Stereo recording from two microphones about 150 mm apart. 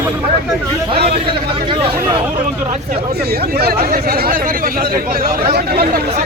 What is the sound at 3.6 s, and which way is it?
Speech, 90° right.